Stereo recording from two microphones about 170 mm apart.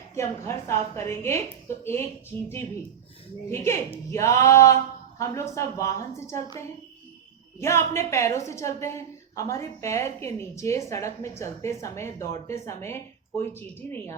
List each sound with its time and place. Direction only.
0.2 s a woman's voice: 15° left (ahead or behind)
3.5 s a woman's voice: 15° left (ahead or behind)
7.6 s a woman's voice: 15° left (ahead or behind)